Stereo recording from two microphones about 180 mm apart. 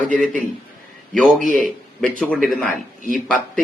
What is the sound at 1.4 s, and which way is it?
Speech, 50° right (ahead or behind).